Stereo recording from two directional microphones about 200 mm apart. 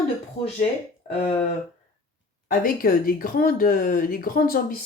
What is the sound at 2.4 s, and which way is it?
Speech, 45° left (ahead or behind).